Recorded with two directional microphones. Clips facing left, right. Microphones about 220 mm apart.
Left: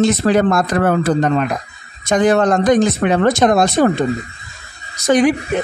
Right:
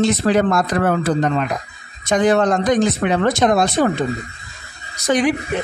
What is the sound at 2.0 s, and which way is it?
Speech, 45° left (ahead or behind).